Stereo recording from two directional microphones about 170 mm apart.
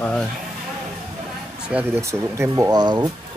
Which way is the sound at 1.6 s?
10° right (ahead or behind).